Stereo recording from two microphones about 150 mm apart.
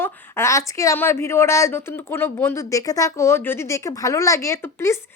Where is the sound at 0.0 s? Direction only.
15° left (ahead or behind).